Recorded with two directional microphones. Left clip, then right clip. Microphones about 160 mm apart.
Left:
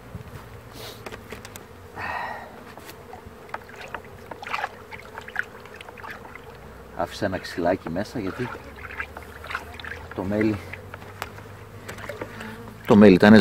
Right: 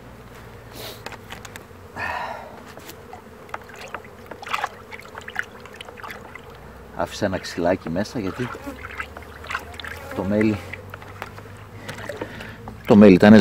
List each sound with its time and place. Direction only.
2.0 s a sound: 40° right (ahead or behind)
3.5 s boat: 35° right (ahead or behind)
7.0 s speech: 35° right (ahead or behind)
12.8 s a man's voice: centre (ahead or behind)